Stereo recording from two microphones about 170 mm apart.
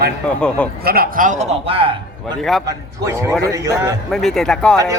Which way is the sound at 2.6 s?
15° right (ahead or behind).